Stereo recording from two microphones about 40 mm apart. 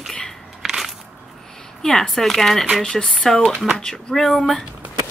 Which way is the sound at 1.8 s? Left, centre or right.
Centre.